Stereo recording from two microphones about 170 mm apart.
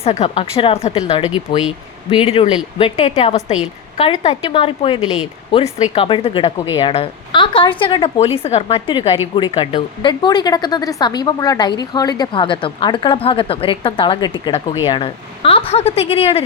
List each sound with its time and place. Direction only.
0.0 s a woman's voice: 35° left (ahead or behind)